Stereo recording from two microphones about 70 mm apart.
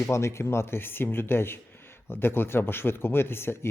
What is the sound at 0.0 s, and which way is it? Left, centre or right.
Speech, left.